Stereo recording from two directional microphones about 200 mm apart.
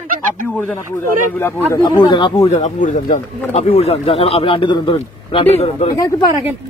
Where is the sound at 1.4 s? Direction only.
15° left (ahead or behind).